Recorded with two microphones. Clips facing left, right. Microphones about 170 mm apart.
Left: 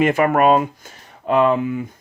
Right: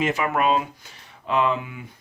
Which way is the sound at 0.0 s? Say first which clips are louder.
Left 7 dB; 55° left (ahead or behind).